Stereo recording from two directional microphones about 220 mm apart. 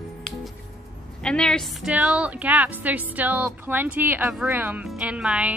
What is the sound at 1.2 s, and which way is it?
A woman's voice, 5° left (ahead or behind).